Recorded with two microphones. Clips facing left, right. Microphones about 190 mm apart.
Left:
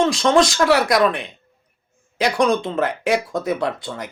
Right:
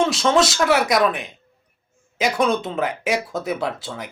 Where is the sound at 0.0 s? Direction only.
5° right (ahead or behind).